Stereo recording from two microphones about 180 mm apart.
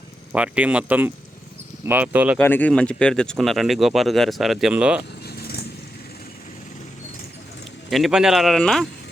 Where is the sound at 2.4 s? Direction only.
10° left (ahead or behind); by 5.0 s 5° right (ahead or behind).